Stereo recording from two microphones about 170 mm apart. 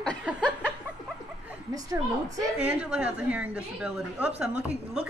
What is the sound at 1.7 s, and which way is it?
Speech, 20° right (ahead or behind).